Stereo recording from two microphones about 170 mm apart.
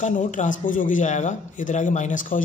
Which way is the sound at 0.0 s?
45° left (ahead or behind).